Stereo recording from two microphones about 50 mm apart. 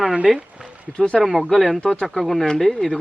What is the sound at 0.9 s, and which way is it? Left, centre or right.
Speech, centre.